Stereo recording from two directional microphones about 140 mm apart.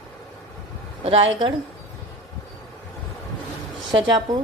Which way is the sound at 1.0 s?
40° right (ahead or behind).